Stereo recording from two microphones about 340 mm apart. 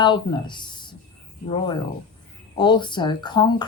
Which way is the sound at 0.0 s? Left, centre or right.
Centre.